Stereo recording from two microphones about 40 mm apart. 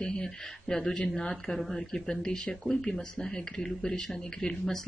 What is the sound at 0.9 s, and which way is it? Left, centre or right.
Speech, left.